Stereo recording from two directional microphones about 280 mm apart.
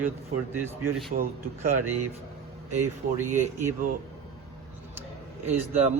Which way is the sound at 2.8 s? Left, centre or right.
Centre.